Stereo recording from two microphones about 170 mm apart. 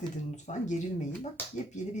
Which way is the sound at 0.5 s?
40° left (ahead or behind).